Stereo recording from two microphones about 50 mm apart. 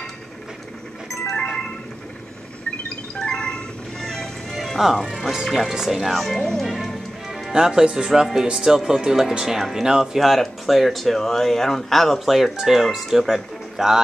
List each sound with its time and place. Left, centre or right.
1.3 s music: centre
3.2 s music: centre
4.6 s speech: centre
6.6 s music: centre
7.5 s speech: centre